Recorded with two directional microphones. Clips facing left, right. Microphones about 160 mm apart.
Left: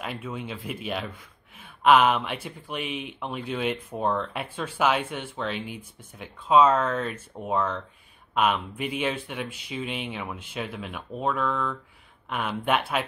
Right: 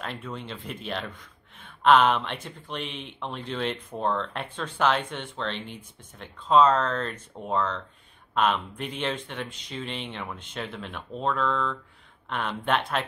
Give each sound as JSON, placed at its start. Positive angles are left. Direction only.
{"t": 0.0, "sound": "speech", "side_deg": 5}